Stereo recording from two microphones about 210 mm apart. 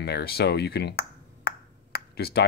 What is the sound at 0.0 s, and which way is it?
Speech, 50° left (ahead or behind).